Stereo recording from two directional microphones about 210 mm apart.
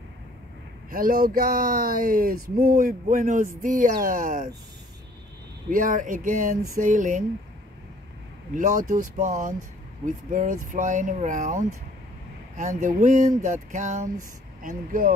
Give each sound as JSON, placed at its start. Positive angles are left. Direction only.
{"t": 0.8, "sound": "speech", "side_deg": -45}
{"t": 5.7, "sound": "speech", "side_deg": -40}
{"t": 8.5, "sound": "speech", "side_deg": -35}